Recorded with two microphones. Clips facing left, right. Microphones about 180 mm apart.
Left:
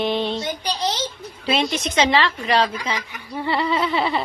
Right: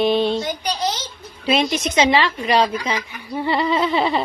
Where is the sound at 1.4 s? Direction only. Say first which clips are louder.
Right 3 dB; 10° right (ahead or behind).